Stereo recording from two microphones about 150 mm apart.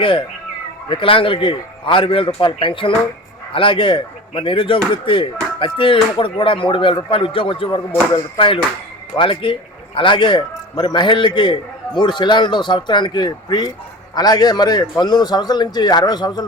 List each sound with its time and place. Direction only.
0.0 s a man's voice: 35° left (ahead or behind)